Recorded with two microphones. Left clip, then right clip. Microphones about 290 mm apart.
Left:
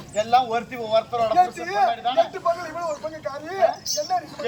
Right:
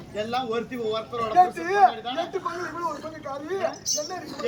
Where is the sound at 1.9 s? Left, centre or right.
Centre.